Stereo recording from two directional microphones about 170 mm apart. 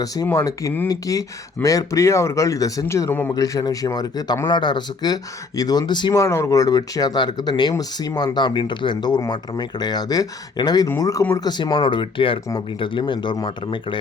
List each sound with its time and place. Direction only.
0.0 s speech: 20° left (ahead or behind)